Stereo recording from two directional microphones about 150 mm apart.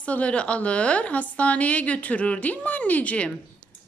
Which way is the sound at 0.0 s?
10° left (ahead or behind).